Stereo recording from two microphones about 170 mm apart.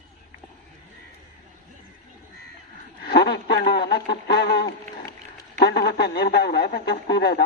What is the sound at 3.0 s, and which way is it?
A man's voice, 70° left (ahead or behind).